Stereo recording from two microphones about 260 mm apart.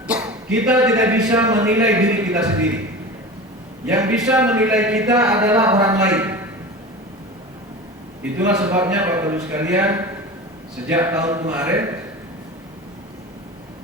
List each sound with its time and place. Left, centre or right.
0.5 s a man's voice: centre
3.8 s a man's voice: centre
8.2 s a man's voice: centre